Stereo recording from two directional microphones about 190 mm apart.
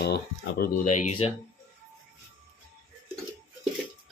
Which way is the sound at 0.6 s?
55° left (ahead or behind).